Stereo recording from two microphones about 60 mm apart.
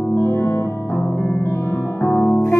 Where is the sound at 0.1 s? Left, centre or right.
Left.